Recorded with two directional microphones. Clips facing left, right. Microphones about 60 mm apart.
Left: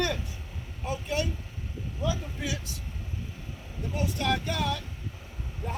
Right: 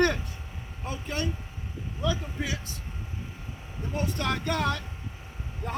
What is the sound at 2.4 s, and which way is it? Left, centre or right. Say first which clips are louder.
Speech: left 2 dB; right.